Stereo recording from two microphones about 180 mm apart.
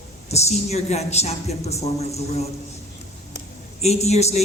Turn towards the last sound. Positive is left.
turn(degrees=35)  # may be behind; listen again after turning